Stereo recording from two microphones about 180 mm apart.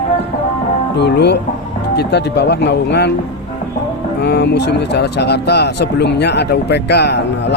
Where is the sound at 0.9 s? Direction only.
70° left (ahead or behind).